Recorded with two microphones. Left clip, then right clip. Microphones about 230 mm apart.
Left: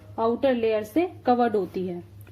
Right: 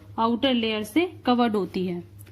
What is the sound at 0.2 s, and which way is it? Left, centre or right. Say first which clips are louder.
A woman's voice: left 1 dB; right.